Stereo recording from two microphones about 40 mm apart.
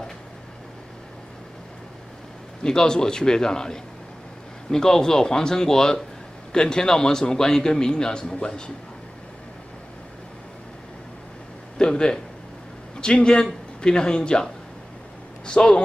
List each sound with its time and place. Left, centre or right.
2.6 s a man's voice: centre
11.8 s a man's voice: centre